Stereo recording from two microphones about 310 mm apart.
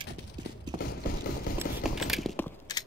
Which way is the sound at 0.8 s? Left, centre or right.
Left.